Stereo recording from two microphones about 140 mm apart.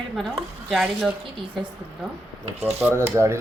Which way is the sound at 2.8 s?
15° right (ahead or behind).